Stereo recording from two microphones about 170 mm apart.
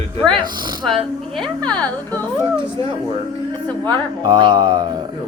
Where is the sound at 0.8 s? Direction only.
Centre (ahead or behind).